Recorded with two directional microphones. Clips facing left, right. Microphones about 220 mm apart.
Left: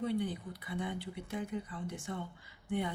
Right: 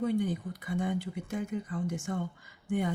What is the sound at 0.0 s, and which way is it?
Speech, 45° right (ahead or behind).